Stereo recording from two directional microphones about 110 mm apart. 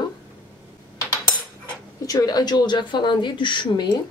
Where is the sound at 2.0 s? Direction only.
35° left (ahead or behind).